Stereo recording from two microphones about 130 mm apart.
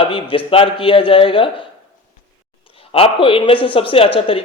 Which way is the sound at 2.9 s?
45° left (ahead or behind).